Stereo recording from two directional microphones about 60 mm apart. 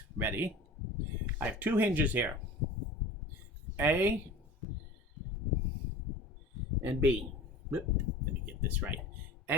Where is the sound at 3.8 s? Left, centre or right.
Right.